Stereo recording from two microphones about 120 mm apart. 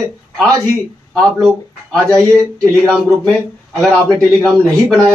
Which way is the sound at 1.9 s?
5° left (ahead or behind).